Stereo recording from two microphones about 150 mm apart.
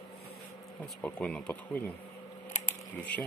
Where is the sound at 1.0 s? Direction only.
5° left (ahead or behind).